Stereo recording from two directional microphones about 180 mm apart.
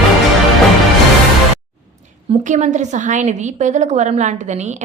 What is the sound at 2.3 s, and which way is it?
A woman's voice, 40° right (ahead or behind).